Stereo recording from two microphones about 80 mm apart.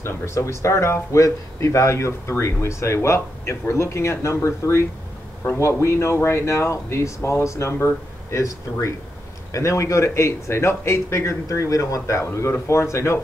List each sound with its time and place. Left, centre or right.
0.0 s speech: left